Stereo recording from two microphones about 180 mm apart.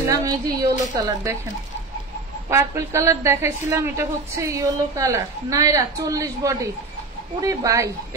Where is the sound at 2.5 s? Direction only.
15° right (ahead or behind).